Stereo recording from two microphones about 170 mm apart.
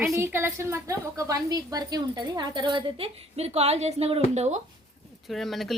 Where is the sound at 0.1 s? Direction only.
15° right (ahead or behind); by 4.2 s 40° right (ahead or behind).